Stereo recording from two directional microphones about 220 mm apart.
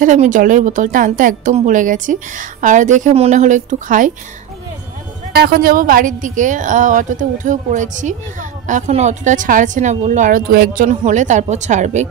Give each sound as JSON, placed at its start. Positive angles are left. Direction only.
{"t": 0.0, "sound": "a woman's voice", "side_deg": -35}
{"t": 5.3, "sound": "a woman's voice", "side_deg": -45}